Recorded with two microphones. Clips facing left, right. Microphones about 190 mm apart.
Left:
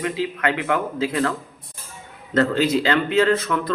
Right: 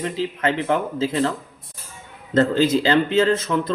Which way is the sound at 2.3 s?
25° right (ahead or behind).